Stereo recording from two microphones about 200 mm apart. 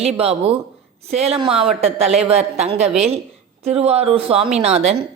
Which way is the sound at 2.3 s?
30° right (ahead or behind).